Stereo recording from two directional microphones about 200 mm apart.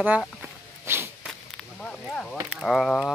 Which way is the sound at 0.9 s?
10° right (ahead or behind).